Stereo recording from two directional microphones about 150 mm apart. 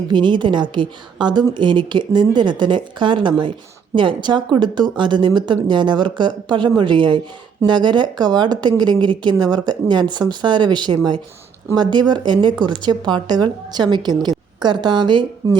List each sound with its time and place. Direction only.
0.1 s speech: 30° right (ahead or behind)